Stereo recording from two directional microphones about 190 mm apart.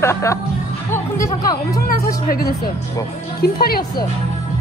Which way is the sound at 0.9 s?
15° left (ahead or behind).